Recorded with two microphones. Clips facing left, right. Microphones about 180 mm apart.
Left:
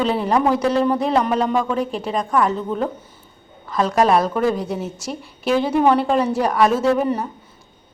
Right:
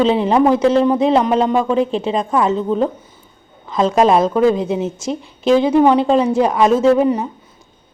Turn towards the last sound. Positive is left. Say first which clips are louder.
# right 5 dB
turn(degrees=-15)  # may be behind; listen again after turning